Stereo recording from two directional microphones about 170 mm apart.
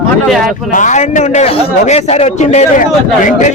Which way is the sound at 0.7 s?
45° left (ahead or behind).